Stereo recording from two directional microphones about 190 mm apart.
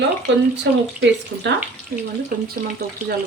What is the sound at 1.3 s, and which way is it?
Speech, 60° right (ahead or behind).